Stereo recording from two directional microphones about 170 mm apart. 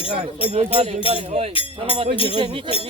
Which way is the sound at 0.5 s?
35° right (ahead or behind).